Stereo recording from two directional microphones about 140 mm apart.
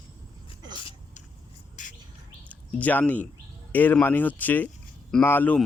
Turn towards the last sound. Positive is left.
turn(degrees=15)  # may be behind; listen again after turning